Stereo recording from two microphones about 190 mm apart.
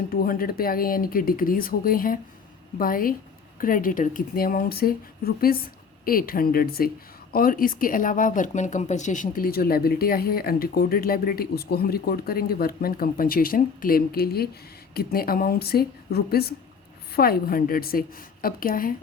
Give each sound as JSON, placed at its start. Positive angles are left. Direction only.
{"t": 0.1, "sound": "speech", "side_deg": 50}